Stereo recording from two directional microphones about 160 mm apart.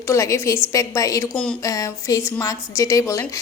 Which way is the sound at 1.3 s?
5° left (ahead or behind).